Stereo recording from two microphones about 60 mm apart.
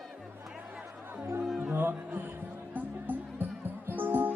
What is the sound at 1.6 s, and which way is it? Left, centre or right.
Music, right.